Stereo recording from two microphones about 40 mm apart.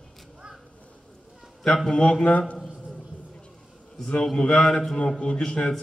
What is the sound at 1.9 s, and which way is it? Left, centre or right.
Speech, left.